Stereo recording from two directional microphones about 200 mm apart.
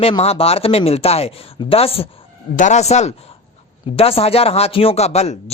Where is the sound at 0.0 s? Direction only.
30° left (ahead or behind).